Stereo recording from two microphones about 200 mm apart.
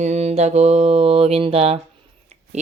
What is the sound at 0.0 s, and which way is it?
Speech, 35° right (ahead or behind).